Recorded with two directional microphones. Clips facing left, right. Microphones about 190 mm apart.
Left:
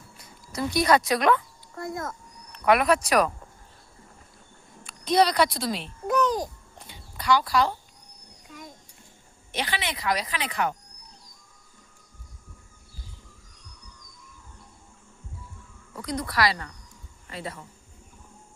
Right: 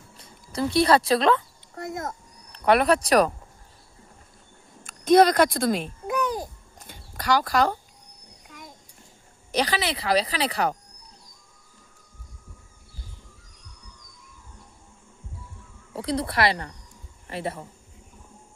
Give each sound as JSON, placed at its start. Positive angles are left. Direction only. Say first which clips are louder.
{"t": 0.2, "sound": "speech", "louder": "right 3 dB", "side_deg": -30}
{"t": 2.0, "sound": "speech", "louder": "right 2 dB", "side_deg": -35}
{"t": 4.8, "sound": "speech", "louder": "right 5 dB", "side_deg": -45}
{"t": 6.7, "sound": "a sound", "louder": "right 4 dB", "side_deg": -45}
{"t": 9.5, "sound": "a woman's voice", "louder": "right 6 dB", "side_deg": -40}
{"t": 15.9, "sound": "speech", "louder": "right 4 dB", "side_deg": -30}